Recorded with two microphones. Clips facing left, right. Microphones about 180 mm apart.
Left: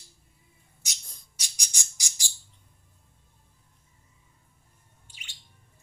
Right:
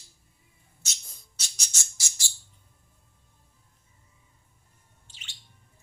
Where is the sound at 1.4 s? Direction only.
15° left (ahead or behind).